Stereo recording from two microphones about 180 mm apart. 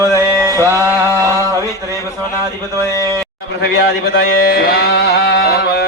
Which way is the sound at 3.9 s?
60° left (ahead or behind).